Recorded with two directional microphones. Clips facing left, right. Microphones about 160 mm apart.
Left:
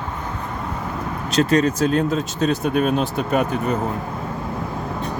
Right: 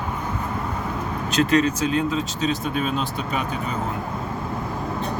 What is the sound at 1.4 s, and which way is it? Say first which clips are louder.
Speech: left 2 dB; 40° left (ahead or behind).